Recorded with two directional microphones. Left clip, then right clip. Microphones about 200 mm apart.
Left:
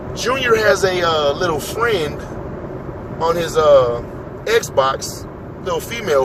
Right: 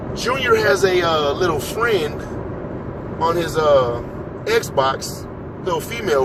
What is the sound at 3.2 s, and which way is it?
Speech, 20° left (ahead or behind).